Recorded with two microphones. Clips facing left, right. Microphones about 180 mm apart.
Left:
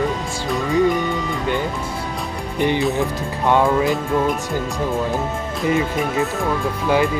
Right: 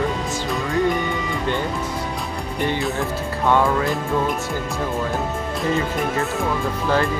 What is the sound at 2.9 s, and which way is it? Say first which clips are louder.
Speech: left 3 dB; 15° left (ahead or behind).